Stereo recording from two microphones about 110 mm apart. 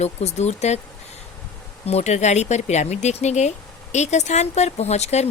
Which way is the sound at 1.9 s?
85° left.